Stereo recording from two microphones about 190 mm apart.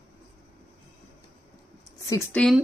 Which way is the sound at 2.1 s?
15° left (ahead or behind).